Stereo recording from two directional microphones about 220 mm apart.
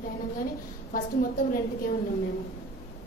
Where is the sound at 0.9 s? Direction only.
40° left (ahead or behind).